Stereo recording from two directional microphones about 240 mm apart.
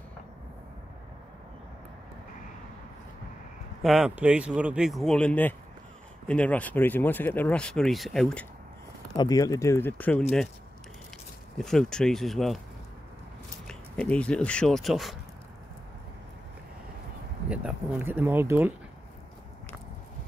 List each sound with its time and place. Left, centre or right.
3.8 s speech: centre
9.1 s speech: centre
11.5 s speech: centre
13.7 s speech: centre
17.5 s a sound: centre